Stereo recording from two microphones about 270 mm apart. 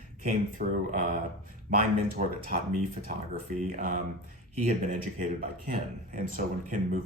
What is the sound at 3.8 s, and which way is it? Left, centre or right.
Speech, right.